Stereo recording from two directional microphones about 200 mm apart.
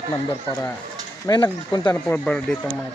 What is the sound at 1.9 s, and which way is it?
Speech, 10° left (ahead or behind).